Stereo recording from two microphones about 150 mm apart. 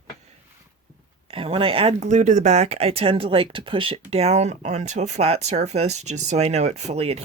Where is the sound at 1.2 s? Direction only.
35° right (ahead or behind).